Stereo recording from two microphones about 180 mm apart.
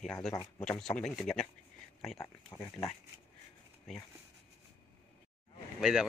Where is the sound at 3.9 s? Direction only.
Centre (ahead or behind).